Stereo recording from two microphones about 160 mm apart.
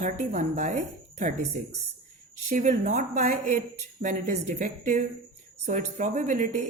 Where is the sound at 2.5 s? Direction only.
55° right (ahead or behind).